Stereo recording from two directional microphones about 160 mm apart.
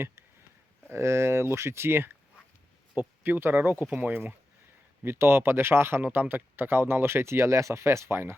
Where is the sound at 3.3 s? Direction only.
15° right (ahead or behind).